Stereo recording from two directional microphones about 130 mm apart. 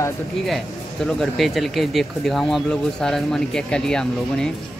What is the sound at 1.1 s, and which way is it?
Speech, centre (ahead or behind).